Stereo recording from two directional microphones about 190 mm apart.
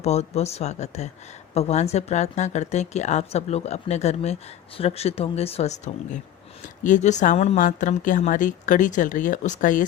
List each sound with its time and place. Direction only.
0.0 s a woman's voice: 35° left (ahead or behind)